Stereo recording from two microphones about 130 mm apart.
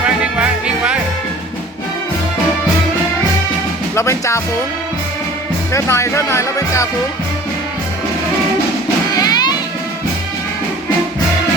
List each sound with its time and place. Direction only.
0.3 s music: 10° right (ahead or behind)
3.9 s music: 20° left (ahead or behind)
5.7 s speech: 20° left (ahead or behind)
9.1 s music: 30° left (ahead or behind)